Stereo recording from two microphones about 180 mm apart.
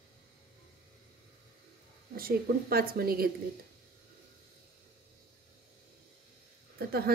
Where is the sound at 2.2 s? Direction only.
55° right (ahead or behind).